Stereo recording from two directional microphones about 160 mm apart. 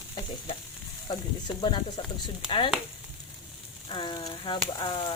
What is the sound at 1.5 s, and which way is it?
Frying, 30° left (ahead or behind).